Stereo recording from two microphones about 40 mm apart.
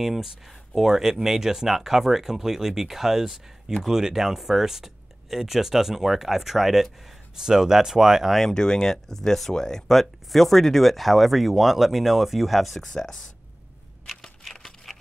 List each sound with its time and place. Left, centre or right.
0.0 s speech: centre
7.3 s speech: centre
8.3 s speech: centre
8.5 s speech: centre
12.8 s speech: centre
14.4 s a sound: centre